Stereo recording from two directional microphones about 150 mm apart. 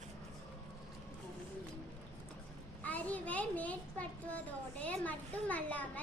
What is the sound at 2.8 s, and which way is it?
A child's voice, 10° left (ahead or behind).